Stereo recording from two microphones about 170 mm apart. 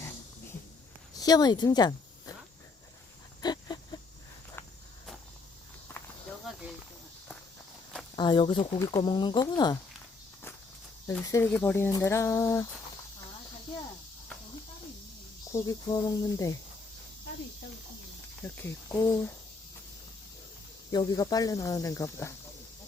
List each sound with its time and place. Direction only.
1.1 s speech: 20° left (ahead or behind)
3.4 s a sound: 25° left (ahead or behind)
5.9 s walk: 10° left (ahead or behind)
6.4 s snake: centre (ahead or behind)
8.1 s speech: 25° left (ahead or behind)
11.1 s speech: 15° left (ahead or behind)
15.5 s speech: 20° left (ahead or behind)
18.4 s speech: 15° left (ahead or behind)
20.9 s speech: 20° left (ahead or behind)